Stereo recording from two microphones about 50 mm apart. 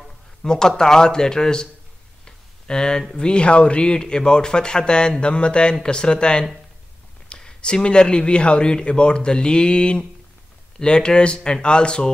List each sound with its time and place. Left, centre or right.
0.4 s speech: centre